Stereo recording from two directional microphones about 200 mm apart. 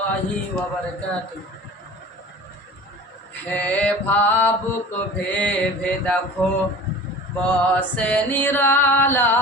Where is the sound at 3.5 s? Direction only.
5° left (ahead or behind).